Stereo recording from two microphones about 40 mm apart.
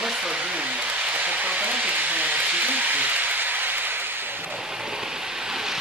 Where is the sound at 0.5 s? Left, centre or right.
Right.